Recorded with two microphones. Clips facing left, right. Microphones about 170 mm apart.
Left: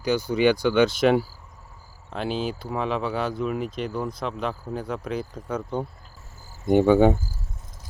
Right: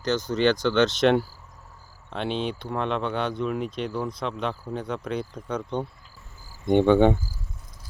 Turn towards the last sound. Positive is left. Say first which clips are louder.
# left 1 dB
turn(degrees=5)  # may be behind; listen again after turning